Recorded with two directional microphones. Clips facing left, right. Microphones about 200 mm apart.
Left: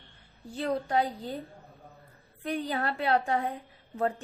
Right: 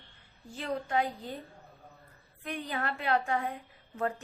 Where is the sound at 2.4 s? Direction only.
35° left (ahead or behind).